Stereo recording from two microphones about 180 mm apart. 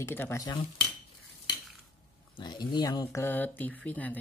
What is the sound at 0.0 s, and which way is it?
Speech, 15° left (ahead or behind).